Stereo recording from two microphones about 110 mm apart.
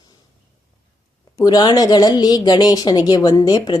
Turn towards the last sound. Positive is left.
turn(degrees=35)  # may be behind; listen again after turning